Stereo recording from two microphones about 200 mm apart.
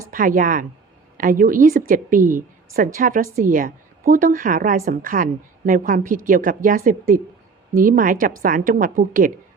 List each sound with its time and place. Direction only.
0.1 s a woman's voice: 45° right (ahead or behind)